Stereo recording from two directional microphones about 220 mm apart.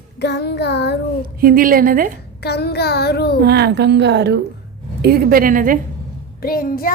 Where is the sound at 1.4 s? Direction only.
40° right (ahead or behind).